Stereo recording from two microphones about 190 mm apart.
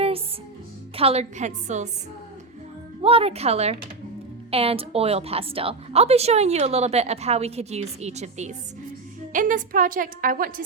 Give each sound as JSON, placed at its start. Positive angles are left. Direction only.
{"t": 0.9, "sound": "a woman's voice", "side_deg": -30}
{"t": 3.0, "sound": "a woman's voice", "side_deg": -30}